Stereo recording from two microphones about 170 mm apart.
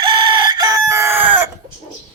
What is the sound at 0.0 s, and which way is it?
Chicken, 30° right (ahead or behind).